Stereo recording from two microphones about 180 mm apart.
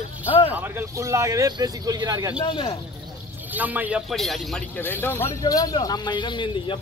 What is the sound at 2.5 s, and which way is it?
Speech, 30° left (ahead or behind).